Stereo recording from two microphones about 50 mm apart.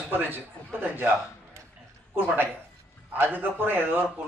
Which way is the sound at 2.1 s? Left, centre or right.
Right.